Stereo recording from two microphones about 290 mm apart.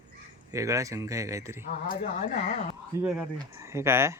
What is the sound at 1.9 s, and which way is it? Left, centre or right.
Speech, left.